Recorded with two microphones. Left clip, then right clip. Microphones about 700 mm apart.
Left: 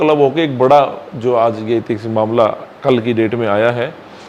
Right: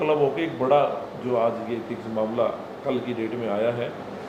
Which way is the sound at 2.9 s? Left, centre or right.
Left.